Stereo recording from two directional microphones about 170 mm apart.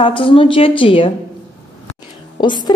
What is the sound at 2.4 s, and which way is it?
Speech, 30° left (ahead or behind).